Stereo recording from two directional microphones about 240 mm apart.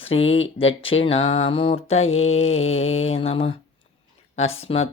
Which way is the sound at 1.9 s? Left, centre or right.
Left.